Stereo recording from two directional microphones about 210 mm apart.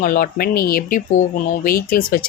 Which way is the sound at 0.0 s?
45° left (ahead or behind).